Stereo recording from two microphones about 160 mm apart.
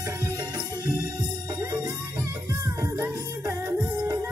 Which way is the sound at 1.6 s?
20° right (ahead or behind).